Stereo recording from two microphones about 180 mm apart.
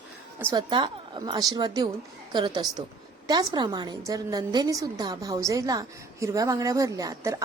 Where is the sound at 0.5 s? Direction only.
25° right (ahead or behind).